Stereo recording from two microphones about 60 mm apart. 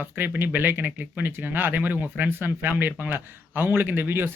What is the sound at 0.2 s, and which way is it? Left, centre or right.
Speech, right.